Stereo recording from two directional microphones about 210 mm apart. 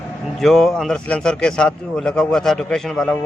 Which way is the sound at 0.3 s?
Centre (ahead or behind).